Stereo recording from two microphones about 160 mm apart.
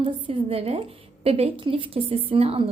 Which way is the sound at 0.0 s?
35° right (ahead or behind).